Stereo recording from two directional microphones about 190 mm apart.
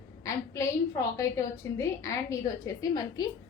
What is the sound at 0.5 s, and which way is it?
A woman's voice, 15° left (ahead or behind).